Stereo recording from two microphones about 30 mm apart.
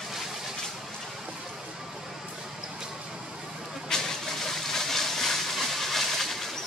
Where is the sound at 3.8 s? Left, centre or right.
Centre.